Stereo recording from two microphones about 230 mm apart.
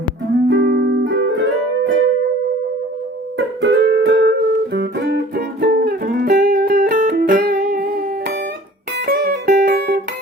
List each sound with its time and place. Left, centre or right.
0.4 s music: right
3.3 s music: right